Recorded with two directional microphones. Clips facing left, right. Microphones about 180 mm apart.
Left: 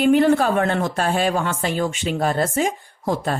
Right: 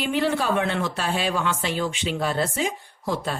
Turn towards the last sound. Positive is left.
turn(degrees=45)  # may be behind; listen again after turning